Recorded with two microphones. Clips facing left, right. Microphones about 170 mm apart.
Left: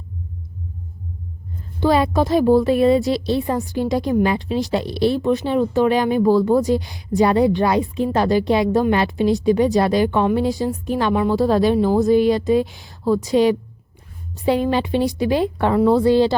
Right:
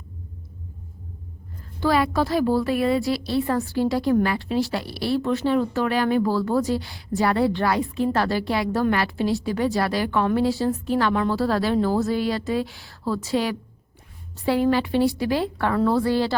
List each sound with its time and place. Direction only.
1.8 s a woman's voice: 20° left (ahead or behind)